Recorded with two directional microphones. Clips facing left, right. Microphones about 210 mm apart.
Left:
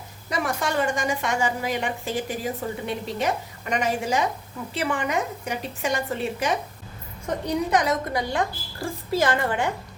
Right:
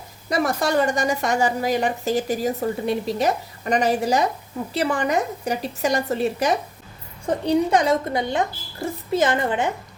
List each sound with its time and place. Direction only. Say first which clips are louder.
0.3 s a woman's voice: right 5 dB; 40° right (ahead or behind); by 9.7 s 20° right (ahead or behind)